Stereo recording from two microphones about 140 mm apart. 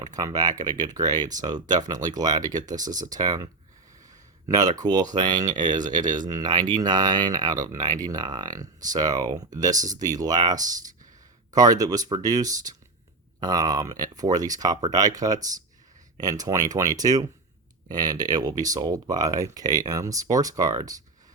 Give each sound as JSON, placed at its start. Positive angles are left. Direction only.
{"t": 0.0, "sound": "speech", "side_deg": -25}